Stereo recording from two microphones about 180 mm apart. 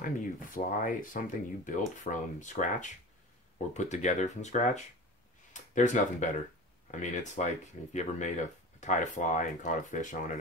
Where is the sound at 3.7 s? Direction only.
40° left (ahead or behind).